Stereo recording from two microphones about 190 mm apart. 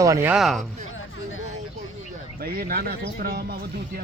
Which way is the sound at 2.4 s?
50° right (ahead or behind).